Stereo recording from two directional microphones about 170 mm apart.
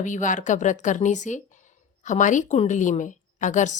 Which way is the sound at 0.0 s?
45° left (ahead or behind).